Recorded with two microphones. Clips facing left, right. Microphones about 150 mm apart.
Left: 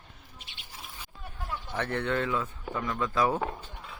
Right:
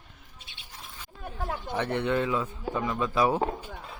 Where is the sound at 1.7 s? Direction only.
15° right (ahead or behind).